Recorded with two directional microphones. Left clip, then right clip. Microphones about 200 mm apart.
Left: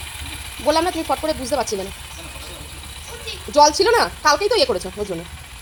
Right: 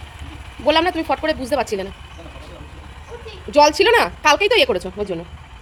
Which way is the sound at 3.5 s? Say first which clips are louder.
Right 1 dB; 25° right (ahead or behind).